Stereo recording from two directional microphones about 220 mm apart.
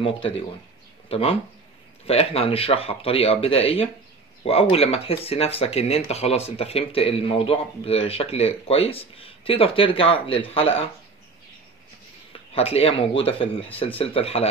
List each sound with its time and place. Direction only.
1.0 s a sound: 25° left (ahead or behind)
2.0 s speech: 25° left (ahead or behind)
12.3 s speech: 25° left (ahead or behind)